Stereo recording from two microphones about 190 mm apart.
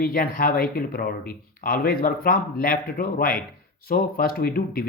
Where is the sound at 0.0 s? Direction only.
50° left (ahead or behind).